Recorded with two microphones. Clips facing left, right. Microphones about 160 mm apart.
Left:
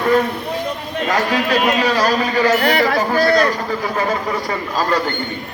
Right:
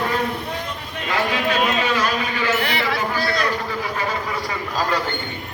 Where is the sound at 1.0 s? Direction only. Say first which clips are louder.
Left 3 dB; 40° left (ahead or behind).